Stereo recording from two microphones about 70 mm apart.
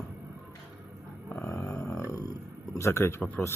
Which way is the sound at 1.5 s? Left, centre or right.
Left.